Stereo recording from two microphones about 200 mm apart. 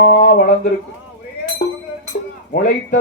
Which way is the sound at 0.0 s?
45° left (ahead or behind).